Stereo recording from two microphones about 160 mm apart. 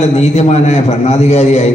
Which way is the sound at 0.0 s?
40° left (ahead or behind).